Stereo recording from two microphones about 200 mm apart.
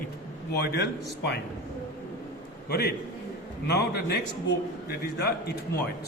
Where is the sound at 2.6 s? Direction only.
55° left (ahead or behind).